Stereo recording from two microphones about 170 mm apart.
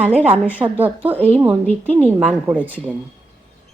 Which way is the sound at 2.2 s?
10° right (ahead or behind).